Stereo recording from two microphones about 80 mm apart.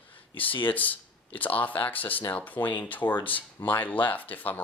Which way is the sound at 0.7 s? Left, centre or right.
Left.